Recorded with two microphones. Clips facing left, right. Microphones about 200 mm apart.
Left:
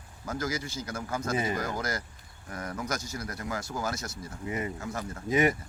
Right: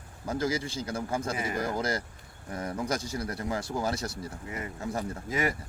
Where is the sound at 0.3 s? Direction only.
30° right (ahead or behind).